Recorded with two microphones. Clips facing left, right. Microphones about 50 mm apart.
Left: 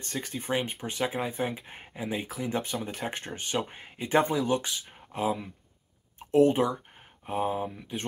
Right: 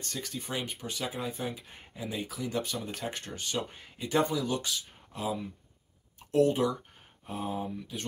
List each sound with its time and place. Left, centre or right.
0.0 s speech: left
6.1 s a sound: left
7.2 s speech: left